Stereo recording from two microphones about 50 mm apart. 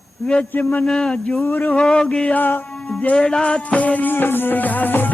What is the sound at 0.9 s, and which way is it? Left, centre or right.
Male singing, centre.